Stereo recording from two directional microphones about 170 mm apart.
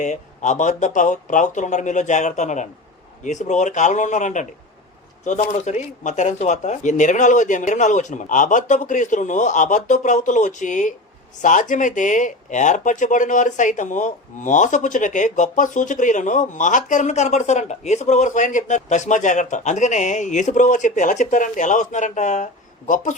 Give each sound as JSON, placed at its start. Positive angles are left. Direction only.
{"t": 0.0, "sound": "speech", "side_deg": 45}
{"t": 5.5, "sound": "speech", "side_deg": 45}